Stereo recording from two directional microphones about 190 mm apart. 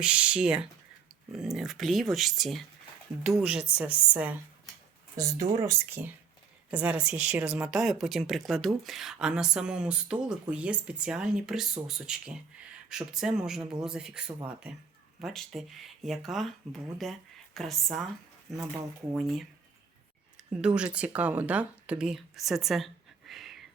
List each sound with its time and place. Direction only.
0.0 s speech: 5° right (ahead or behind)